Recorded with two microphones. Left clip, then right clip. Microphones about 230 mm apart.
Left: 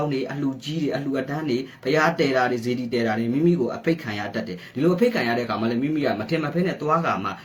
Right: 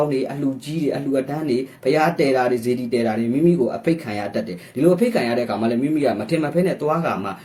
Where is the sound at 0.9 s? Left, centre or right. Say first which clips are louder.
Right 5 dB; centre.